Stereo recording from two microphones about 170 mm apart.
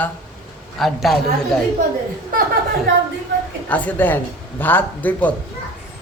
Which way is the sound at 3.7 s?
10° left (ahead or behind).